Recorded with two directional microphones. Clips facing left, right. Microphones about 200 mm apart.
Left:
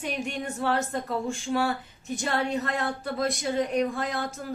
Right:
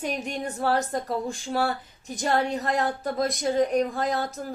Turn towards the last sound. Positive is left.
turn(degrees=-40)  # may be behind; listen again after turning